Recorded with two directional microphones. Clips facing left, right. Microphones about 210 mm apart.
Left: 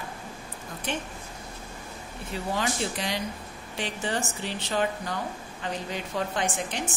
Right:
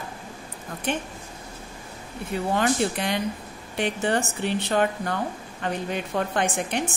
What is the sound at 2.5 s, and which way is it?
A woman's voice, 55° right (ahead or behind).